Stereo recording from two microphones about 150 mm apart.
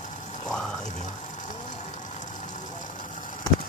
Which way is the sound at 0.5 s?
5° left (ahead or behind).